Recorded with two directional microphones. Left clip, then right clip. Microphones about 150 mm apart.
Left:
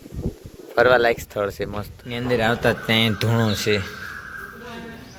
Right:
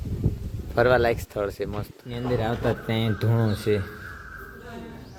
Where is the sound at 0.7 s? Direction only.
5° right (ahead or behind).